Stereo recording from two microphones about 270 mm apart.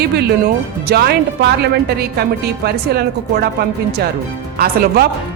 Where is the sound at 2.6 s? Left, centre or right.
Right.